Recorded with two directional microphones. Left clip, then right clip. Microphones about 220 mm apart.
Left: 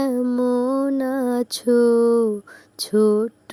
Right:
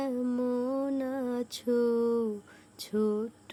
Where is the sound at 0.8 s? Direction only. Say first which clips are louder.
Left 10 dB; 35° left (ahead or behind).